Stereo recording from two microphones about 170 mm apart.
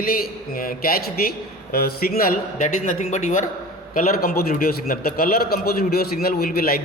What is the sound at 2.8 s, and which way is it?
Speech, 45° left (ahead or behind).